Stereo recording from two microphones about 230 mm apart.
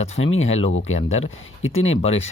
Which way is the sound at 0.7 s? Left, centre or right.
Left.